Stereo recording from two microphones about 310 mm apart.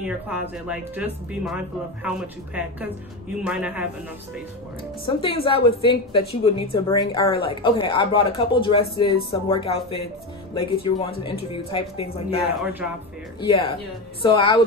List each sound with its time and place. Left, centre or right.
0.0 s speech: centre
5.0 s a woman's voice: centre
13.5 s a woman's voice: centre